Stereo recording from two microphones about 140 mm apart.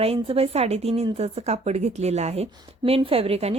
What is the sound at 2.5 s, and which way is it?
A woman's voice, 40° right (ahead or behind).